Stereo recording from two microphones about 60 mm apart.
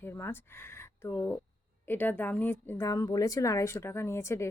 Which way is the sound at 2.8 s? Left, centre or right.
Left.